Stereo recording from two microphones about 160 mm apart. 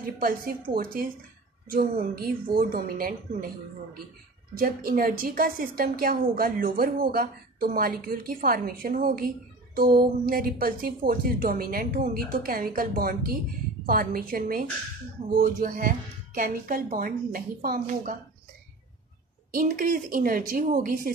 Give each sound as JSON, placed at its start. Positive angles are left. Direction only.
{"t": 0.0, "sound": "a woman's voice", "side_deg": -65}
{"t": 4.6, "sound": "a woman's voice", "side_deg": -60}
{"t": 19.5, "sound": "a woman's voice", "side_deg": -60}